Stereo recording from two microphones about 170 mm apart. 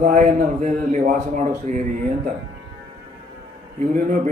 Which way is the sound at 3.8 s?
45° right (ahead or behind).